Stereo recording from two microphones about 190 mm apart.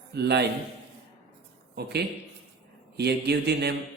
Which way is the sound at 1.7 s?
60° right (ahead or behind).